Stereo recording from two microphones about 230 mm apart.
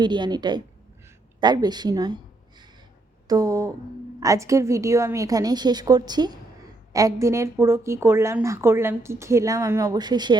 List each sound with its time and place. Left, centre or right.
0.0 s a woman's voice: centre